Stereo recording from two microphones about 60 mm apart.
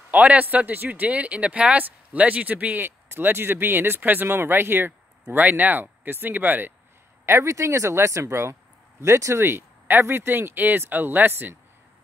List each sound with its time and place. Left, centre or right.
0.1 s speech: right
7.2 s speech: right